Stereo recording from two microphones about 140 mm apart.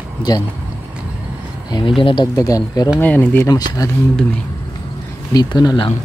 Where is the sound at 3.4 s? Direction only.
25° left (ahead or behind).